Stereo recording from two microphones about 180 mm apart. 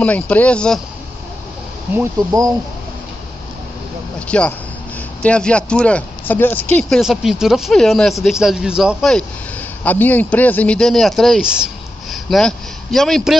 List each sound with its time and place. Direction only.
0.0 s speech: 10° left (ahead or behind)
2.0 s speech: 20° right (ahead or behind)
4.3 s speech: 5° left (ahead or behind)